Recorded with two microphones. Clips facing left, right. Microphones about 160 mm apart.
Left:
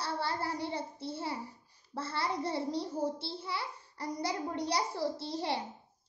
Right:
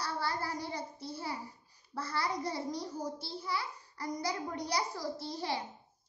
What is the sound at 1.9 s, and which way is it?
A child's voice, 25° left (ahead or behind).